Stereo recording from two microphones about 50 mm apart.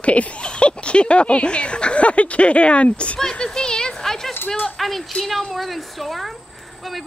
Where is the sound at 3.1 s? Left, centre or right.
Centre.